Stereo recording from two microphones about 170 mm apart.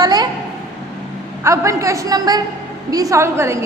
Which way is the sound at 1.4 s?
15° right (ahead or behind).